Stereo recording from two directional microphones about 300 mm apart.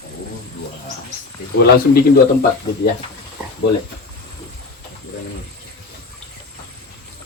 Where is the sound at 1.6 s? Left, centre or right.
Left.